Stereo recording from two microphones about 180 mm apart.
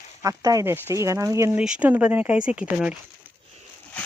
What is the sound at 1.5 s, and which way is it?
Speech, 5° right (ahead or behind).